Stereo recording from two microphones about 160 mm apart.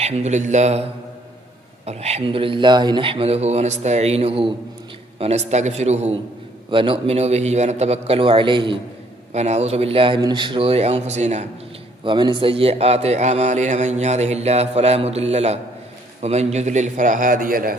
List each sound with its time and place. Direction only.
0.0 s a man's voice: 45° right (ahead or behind)
6.7 s a man's voice: 35° right (ahead or behind)
9.3 s a man's voice: 45° right (ahead or behind)
12.0 s a man's voice: 30° right (ahead or behind); by 17.7 s 60° right (ahead or behind)